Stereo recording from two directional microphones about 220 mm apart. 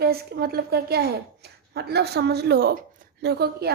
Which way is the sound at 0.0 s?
45° right (ahead or behind).